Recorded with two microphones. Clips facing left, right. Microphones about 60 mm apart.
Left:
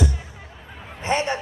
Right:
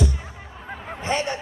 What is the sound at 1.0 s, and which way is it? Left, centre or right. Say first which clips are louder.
Speech: left 2 dB; left.